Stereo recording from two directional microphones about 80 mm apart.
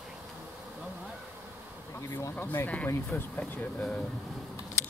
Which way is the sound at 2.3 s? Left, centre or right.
Left.